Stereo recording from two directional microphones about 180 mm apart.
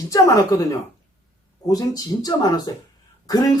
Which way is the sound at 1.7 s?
20° left (ahead or behind).